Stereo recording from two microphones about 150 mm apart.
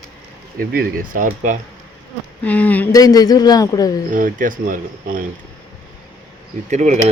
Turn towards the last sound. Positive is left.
turn(degrees=-50)  # may be behind; listen again after turning